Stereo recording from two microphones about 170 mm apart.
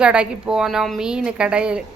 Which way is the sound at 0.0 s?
5° right (ahead or behind).